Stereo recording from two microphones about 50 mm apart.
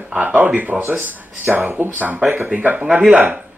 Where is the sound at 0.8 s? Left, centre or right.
Right.